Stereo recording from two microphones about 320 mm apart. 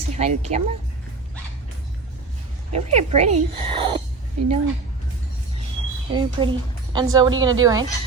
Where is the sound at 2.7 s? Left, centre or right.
Centre.